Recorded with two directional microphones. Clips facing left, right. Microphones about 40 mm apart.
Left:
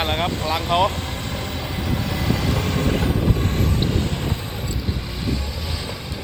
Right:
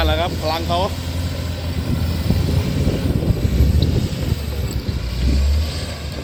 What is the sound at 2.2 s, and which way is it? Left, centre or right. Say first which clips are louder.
Vehicle: even; left.